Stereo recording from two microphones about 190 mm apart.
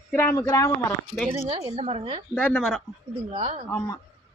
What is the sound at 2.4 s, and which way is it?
Speech, 5° left (ahead or behind).